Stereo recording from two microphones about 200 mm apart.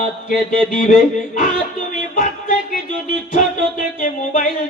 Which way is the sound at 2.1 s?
40° left (ahead or behind).